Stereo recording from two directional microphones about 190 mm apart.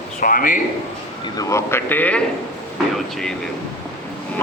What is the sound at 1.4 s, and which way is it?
Speech, 15° left (ahead or behind).